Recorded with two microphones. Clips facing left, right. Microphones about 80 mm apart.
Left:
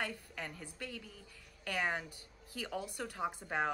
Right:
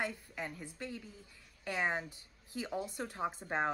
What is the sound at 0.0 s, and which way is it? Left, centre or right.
A woman's voice, centre.